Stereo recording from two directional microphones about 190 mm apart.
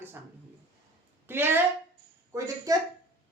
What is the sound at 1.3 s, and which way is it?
Speech, 10° right (ahead or behind).